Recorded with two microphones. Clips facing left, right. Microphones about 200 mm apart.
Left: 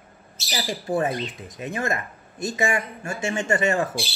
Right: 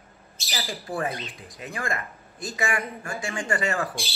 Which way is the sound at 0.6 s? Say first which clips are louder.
Left 6 dB; 20° left (ahead or behind).